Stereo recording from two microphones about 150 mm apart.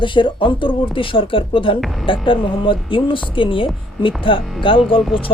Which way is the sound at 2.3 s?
35° left (ahead or behind).